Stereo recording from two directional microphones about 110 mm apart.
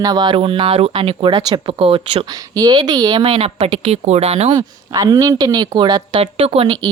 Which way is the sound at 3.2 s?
60° right (ahead or behind).